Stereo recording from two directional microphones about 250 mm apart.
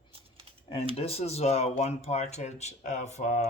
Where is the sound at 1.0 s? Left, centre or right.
Left.